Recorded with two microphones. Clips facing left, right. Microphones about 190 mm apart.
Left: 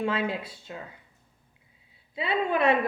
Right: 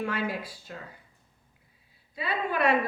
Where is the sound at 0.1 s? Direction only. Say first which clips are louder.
Left 2 dB; 25° left (ahead or behind).